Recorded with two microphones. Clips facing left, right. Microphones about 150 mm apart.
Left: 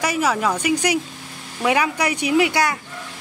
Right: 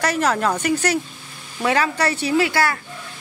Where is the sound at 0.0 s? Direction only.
10° left (ahead or behind).